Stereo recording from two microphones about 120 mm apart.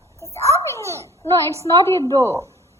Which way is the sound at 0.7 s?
25° left (ahead or behind).